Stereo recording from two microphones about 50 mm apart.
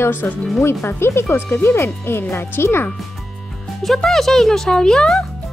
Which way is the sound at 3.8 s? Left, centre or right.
Centre.